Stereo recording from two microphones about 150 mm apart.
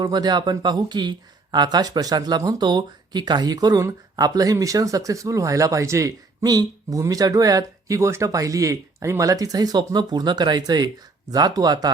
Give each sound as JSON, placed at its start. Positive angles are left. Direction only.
{"t": 0.0, "sound": "speech", "side_deg": -25}